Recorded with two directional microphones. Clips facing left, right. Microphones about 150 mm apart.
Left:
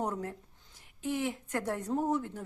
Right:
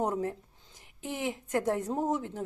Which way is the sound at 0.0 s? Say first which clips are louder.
Right 4 dB; 10° right (ahead or behind).